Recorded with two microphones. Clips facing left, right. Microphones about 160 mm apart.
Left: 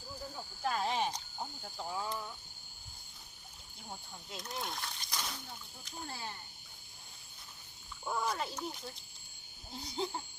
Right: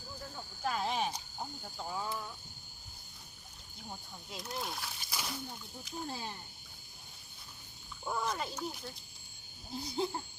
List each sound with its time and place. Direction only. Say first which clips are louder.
0.2 s frog: left 1 dB; 5° left (ahead or behind)
3.8 s speech: right 1 dB; centre (ahead or behind)
6.1 s speech: right 1 dB; 15° right (ahead or behind)
8.0 s speech: even; centre (ahead or behind)